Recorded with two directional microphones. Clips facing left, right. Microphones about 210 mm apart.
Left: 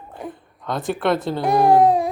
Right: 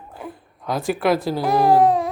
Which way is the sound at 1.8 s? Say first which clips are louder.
Left 1 dB; 10° left (ahead or behind).